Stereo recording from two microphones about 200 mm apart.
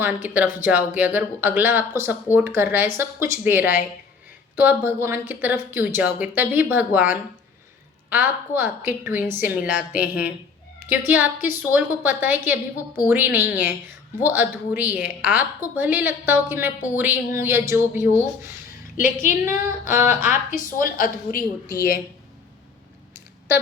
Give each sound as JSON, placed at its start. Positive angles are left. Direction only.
{"t": 0.0, "sound": "a woman's voice", "side_deg": -10}
{"t": 19.2, "sound": "a woman's voice", "side_deg": 40}